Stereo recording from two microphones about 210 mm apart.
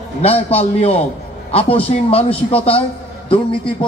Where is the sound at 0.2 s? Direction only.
30° left (ahead or behind).